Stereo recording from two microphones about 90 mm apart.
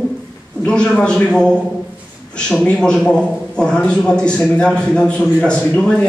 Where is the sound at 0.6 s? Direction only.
10° left (ahead or behind).